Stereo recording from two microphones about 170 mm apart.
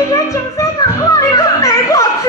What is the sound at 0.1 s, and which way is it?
Music, 20° left (ahead or behind).